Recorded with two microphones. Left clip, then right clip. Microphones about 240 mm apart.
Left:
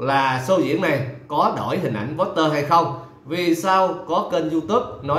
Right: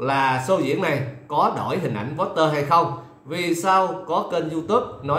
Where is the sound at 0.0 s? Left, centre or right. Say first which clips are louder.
Left 1 dB; centre.